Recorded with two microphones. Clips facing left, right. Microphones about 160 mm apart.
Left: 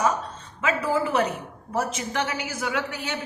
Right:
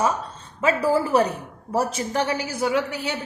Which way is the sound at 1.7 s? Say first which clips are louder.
Right 3 dB; 35° right (ahead or behind).